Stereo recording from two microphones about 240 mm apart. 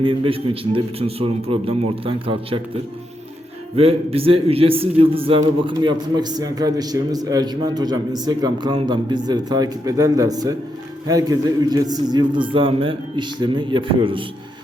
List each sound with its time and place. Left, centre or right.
0.0 s a man's voice: right
3.8 s a man's voice: right